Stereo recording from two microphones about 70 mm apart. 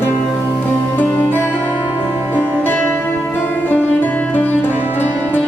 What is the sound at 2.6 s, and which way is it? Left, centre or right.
Music, left.